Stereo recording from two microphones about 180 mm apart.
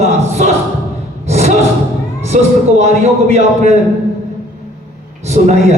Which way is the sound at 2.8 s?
40° right (ahead or behind).